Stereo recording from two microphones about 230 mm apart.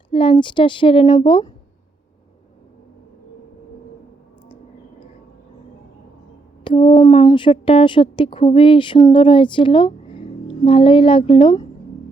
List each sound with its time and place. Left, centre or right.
0.1 s a woman's voice: left
6.7 s a woman's voice: left